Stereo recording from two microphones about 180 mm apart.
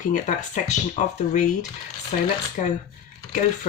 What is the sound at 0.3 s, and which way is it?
Speech, 40° left (ahead or behind).